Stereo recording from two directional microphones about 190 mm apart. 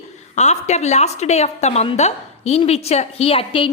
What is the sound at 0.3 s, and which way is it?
A woman's voice, 35° left (ahead or behind).